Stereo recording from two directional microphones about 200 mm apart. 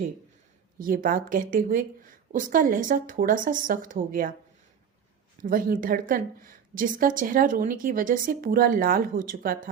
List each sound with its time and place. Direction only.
0.8 s a woman's voice: 45° right (ahead or behind)
5.4 s a woman's voice: 45° right (ahead or behind)